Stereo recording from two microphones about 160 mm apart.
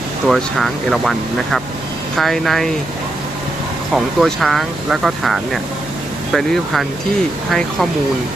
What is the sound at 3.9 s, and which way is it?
Speech, centre (ahead or behind).